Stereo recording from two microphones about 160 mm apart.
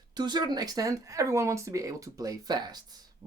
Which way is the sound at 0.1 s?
25° right (ahead or behind).